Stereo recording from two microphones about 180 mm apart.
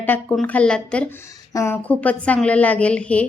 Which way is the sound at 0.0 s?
10° left (ahead or behind).